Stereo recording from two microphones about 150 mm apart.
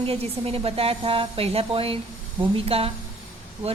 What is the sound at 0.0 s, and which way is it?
Speech, 40° right (ahead or behind).